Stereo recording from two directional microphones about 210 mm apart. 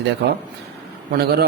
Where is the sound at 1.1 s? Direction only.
50° right (ahead or behind).